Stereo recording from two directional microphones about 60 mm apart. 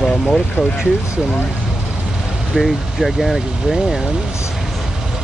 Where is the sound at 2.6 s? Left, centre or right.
Centre.